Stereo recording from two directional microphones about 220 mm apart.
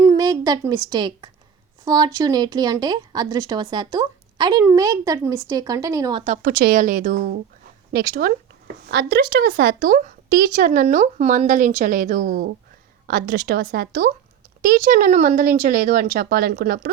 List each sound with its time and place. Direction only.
0.0 s a sound: 15° right (ahead or behind)
0.9 s speech: 20° right (ahead or behind)
6.2 s speech: 40° right (ahead or behind)